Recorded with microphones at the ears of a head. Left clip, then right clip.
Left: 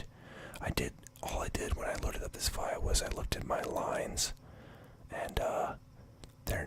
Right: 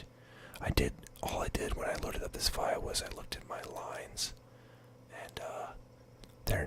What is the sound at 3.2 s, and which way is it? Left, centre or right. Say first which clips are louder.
Speech: left 7 dB; left.